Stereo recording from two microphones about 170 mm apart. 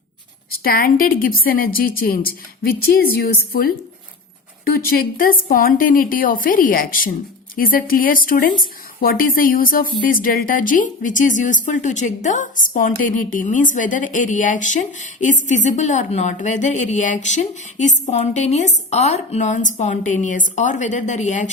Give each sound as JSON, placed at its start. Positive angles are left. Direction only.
{"t": 0.6, "sound": "a woman's voice", "side_deg": 60}
{"t": 4.9, "sound": "a woman's voice", "side_deg": 60}